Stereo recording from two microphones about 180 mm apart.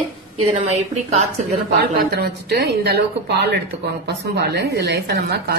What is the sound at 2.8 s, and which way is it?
Speech, 70° right (ahead or behind).